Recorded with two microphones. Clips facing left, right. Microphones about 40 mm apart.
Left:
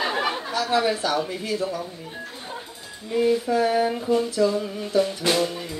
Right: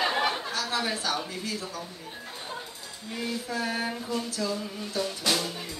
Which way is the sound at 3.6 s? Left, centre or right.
Left.